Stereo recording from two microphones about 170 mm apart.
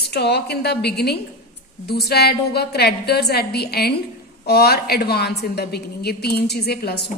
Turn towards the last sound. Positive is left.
turn(degrees=70)  # may be behind; listen again after turning